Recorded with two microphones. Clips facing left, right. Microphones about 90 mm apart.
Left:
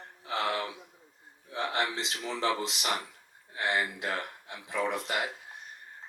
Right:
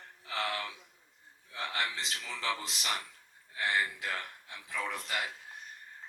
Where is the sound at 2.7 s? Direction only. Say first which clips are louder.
Left 4 dB; 20° left (ahead or behind).